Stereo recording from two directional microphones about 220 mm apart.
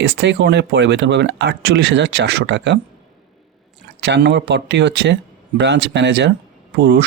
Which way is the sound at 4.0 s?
50° right (ahead or behind).